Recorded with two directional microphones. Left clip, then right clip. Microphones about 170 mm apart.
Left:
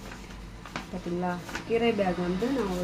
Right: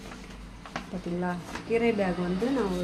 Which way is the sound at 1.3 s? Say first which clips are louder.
Right 1 dB; 15° right (ahead or behind).